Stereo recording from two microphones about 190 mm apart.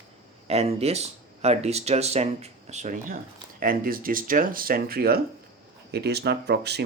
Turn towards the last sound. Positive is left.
turn(degrees=-60)  # may be behind; listen again after turning